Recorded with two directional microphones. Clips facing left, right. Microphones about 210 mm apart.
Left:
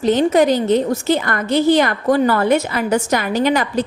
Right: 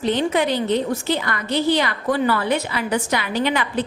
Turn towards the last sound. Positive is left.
turn(degrees=40)  # may be behind; listen again after turning